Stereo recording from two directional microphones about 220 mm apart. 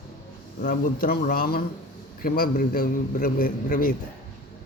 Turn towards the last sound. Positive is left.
turn(degrees=40)  # may be behind; listen again after turning